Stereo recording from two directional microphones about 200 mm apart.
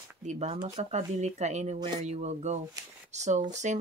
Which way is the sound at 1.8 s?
20° right (ahead or behind).